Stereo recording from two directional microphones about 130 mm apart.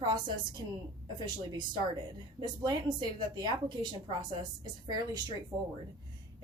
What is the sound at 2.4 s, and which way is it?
Speech, 35° right (ahead or behind).